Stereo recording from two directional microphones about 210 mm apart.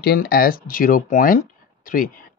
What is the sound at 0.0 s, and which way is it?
Speech, 45° left (ahead or behind).